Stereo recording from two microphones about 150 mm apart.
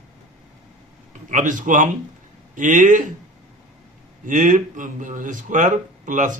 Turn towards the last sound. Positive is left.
turn(degrees=-60)  # may be behind; listen again after turning